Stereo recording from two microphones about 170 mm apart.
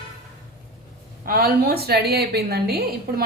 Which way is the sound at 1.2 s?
60° right (ahead or behind).